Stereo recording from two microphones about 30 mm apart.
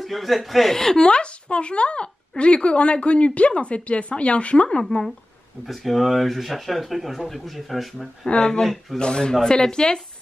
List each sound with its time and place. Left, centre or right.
0.0 s speech: centre
0.9 s speech: left
5.9 s speech: centre
8.3 s speech: left